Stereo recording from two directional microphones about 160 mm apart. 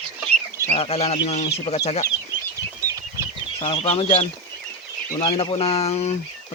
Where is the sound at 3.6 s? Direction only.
35° left (ahead or behind).